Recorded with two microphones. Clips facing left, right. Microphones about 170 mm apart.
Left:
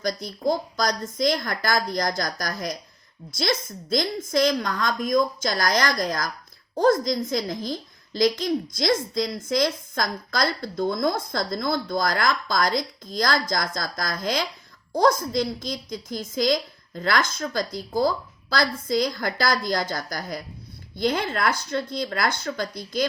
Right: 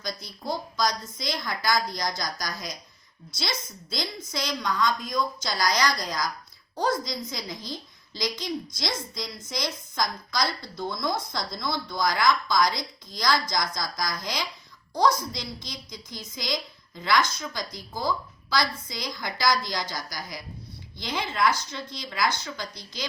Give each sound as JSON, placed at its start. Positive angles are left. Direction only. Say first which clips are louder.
{"t": 0.0, "sound": "a woman's voice", "louder": "left 10 dB", "side_deg": 50}